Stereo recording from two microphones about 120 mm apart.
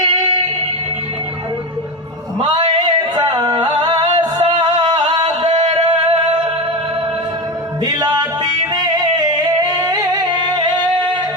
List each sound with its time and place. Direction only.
2.4 s a sound: 40° right (ahead or behind)
5.5 s music: 70° right (ahead or behind); by 6.5 s 50° right (ahead or behind)
7.9 s music: 35° right (ahead or behind)